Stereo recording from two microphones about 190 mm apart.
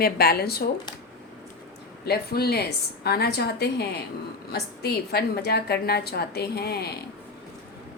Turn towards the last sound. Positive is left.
turn(degrees=55)  # may be behind; listen again after turning